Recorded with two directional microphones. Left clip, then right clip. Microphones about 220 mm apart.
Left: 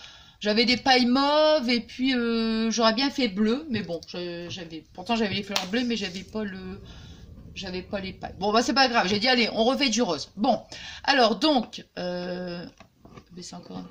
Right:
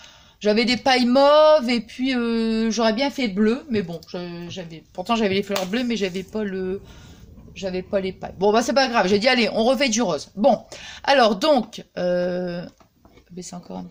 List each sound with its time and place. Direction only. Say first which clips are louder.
0.3 s speech: right 3 dB; 35° right (ahead or behind)